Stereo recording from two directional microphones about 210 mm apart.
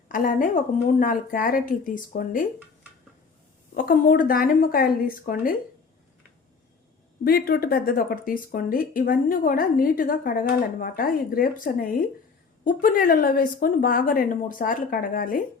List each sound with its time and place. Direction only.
0.1 s speech: 40° left (ahead or behind)
3.8 s speech: 45° left (ahead or behind)
7.3 s speech: 45° left (ahead or behind)